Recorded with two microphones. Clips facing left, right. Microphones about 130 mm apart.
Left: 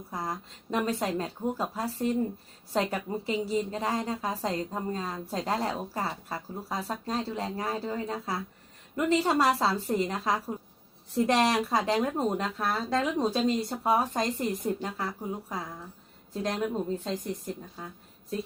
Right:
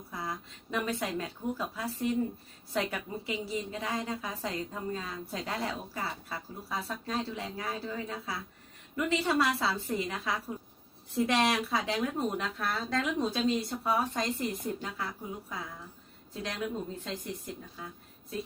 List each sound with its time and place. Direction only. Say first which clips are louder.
0.1 s a woman's voice: left 3 dB; 40° left (ahead or behind)